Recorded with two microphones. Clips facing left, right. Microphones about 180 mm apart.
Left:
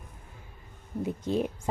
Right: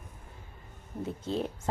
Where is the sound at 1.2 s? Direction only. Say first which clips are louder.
Left 4 dB; 15° left (ahead or behind).